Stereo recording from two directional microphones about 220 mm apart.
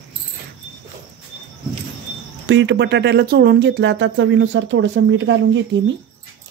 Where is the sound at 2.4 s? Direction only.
55° right (ahead or behind).